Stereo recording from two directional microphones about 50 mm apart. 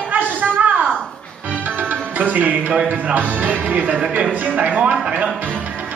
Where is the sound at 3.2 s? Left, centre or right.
Right.